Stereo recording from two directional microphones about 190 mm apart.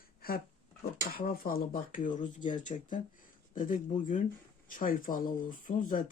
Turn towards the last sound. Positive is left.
turn(degrees=45)  # may be behind; listen again after turning